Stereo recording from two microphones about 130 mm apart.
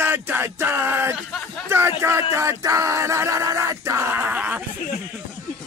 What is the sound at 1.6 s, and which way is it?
Speech, 20° right (ahead or behind).